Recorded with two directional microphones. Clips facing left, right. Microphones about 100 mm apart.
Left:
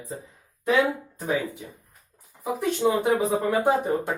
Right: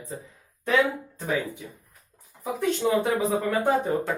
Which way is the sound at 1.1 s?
15° left (ahead or behind).